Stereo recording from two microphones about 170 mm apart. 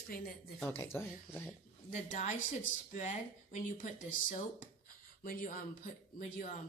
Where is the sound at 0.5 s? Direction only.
10° left (ahead or behind).